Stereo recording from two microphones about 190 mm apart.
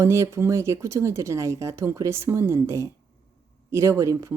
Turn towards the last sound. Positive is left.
turn(degrees=-15)  # may be behind; listen again after turning